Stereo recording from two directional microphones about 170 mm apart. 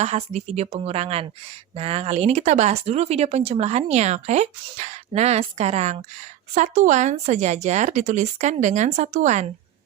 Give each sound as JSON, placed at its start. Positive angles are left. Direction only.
{"t": 0.0, "sound": "speech", "side_deg": -40}